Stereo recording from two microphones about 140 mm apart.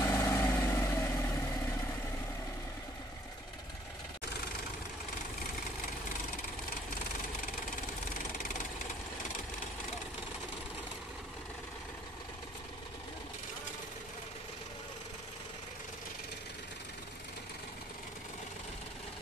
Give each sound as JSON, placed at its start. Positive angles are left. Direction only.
{"t": 0.0, "sound": "vehicle", "side_deg": 20}